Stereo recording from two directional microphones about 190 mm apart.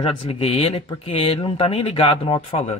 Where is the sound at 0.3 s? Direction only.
30° left (ahead or behind).